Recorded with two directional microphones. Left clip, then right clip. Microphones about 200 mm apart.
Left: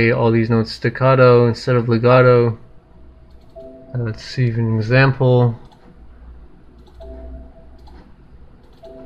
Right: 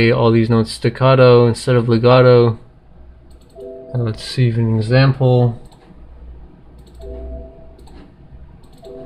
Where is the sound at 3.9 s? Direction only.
Centre (ahead or behind).